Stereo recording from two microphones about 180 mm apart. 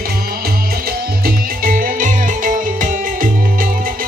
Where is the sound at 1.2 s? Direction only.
50° right (ahead or behind).